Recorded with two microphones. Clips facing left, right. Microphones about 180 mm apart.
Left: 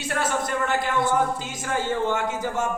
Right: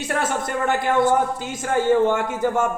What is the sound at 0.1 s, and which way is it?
A man's voice, 55° right (ahead or behind).